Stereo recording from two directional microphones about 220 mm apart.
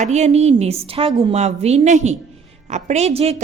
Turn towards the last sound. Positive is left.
turn(degrees=-30)  # may be behind; listen again after turning